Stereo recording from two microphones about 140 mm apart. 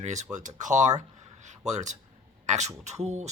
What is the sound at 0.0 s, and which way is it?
Speech, 55° right (ahead or behind).